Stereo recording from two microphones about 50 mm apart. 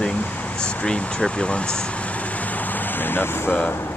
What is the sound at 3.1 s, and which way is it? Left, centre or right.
Speech, left.